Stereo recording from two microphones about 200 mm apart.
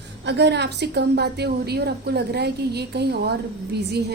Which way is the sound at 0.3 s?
60° right (ahead or behind).